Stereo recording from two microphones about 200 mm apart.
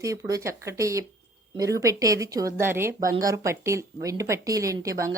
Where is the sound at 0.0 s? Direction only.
15° right (ahead or behind).